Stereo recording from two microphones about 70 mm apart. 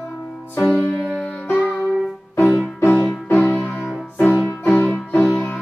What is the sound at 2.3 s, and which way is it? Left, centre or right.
Music, left.